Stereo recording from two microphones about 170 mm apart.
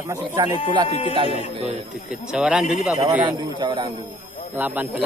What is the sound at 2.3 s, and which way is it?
Speech, 5° right (ahead or behind).